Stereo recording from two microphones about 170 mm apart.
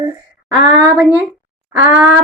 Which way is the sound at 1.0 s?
10° right (ahead or behind).